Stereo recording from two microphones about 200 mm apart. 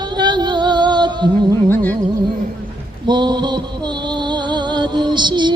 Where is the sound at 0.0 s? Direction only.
20° right (ahead or behind).